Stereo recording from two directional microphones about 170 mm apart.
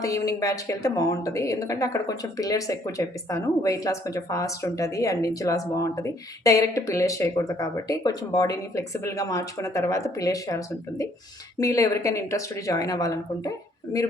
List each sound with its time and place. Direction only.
0.0 s a woman's voice: 20° left (ahead or behind)